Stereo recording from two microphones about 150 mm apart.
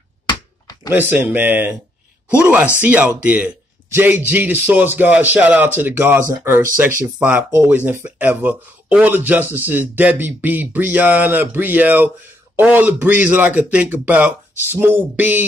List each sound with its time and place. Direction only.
0.8 s speech: 15° right (ahead or behind)